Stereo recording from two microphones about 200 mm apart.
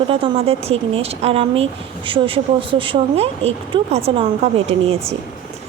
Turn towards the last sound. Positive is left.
turn(degrees=-30)  # may be behind; listen again after turning